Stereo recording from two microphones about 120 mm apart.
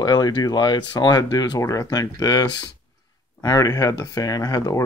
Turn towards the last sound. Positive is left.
turn(degrees=30)  # may be behind; listen again after turning